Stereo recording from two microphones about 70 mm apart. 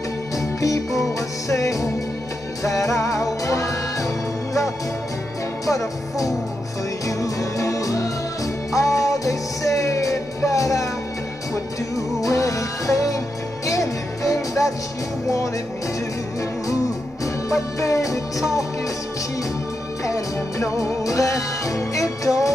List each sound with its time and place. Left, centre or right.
0.4 s music: left
5.7 s music: left
12.2 s music: left
17.2 s music: left
20.1 s music: left